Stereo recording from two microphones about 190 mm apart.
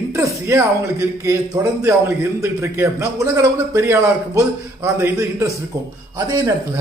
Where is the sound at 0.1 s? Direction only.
15° right (ahead or behind).